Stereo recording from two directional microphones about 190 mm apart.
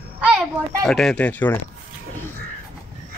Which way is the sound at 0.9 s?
5° left (ahead or behind).